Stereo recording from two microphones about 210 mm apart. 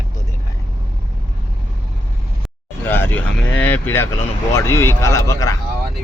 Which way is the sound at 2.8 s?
10° left (ahead or behind).